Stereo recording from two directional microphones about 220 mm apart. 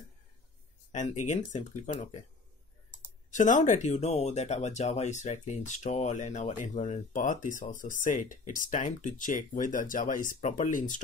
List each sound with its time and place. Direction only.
0.9 s speech: 35° left (ahead or behind)
3.3 s speech: 35° left (ahead or behind)